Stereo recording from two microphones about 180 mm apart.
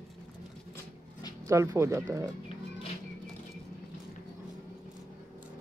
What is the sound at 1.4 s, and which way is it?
Speech, 15° right (ahead or behind).